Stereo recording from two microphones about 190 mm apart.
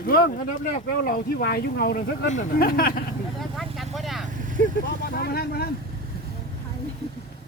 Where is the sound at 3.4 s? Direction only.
Centre (ahead or behind).